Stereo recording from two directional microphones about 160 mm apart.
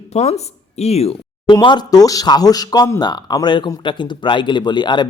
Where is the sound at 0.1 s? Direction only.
40° left (ahead or behind).